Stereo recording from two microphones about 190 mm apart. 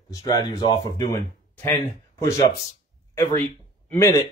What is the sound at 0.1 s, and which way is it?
Speech, 20° left (ahead or behind).